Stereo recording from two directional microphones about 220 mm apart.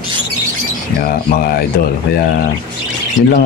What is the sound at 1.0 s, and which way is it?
Speech, 45° left (ahead or behind).